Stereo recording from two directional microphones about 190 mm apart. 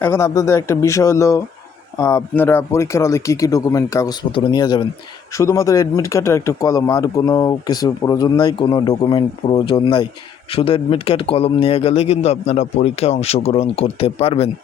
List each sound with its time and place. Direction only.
0.0 s a man's voice: 15° left (ahead or behind); by 14.5 s 30° left (ahead or behind)